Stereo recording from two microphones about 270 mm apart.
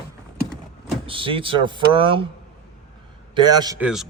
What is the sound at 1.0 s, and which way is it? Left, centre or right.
Speech, centre.